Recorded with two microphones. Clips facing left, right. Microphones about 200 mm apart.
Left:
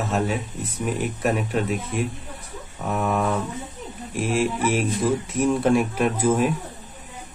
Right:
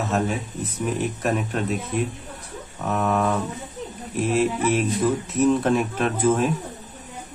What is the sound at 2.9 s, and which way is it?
Speech, 10° left (ahead or behind).